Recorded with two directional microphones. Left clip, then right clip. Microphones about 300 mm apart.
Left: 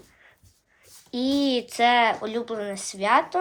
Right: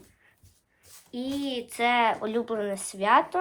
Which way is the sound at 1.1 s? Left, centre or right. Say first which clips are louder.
Left 8 dB; centre.